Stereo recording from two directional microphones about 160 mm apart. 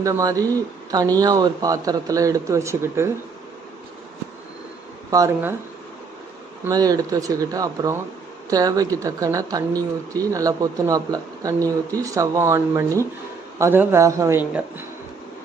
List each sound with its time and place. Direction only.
0.0 s speech: 20° right (ahead or behind)
5.1 s a man's voice: 15° right (ahead or behind)
6.7 s a man's voice: 20° right (ahead or behind)